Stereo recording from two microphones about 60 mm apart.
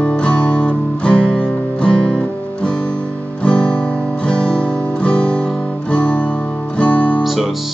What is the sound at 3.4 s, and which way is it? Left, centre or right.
Guitar, centre.